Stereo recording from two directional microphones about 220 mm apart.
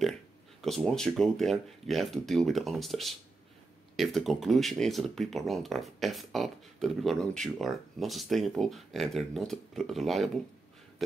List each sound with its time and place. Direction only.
0.6 s speech: centre (ahead or behind)